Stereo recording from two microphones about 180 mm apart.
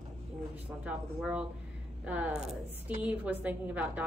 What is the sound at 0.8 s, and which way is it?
A woman's voice, 5° right (ahead or behind).